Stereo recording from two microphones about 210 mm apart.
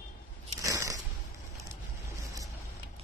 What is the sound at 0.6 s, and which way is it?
Biting, 15° right (ahead or behind).